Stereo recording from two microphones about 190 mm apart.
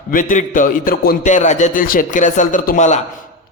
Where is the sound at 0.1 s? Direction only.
45° left (ahead or behind).